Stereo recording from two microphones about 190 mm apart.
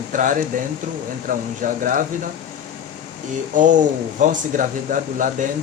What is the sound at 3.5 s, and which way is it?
Speech, 40° right (ahead or behind).